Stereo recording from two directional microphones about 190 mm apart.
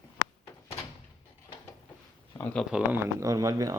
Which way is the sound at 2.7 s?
5° right (ahead or behind).